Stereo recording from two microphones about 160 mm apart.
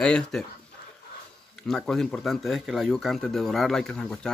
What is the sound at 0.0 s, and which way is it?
Speech, 5° left (ahead or behind).